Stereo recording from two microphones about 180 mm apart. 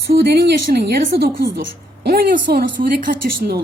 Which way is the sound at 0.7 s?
60° right (ahead or behind).